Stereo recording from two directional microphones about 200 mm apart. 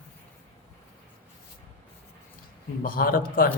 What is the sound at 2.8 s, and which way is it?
Speech, 45° left (ahead or behind).